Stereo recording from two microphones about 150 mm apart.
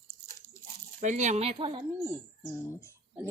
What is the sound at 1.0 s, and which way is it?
Speech, 55° right (ahead or behind).